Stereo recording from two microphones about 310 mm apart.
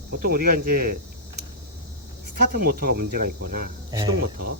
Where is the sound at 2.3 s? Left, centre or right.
Right.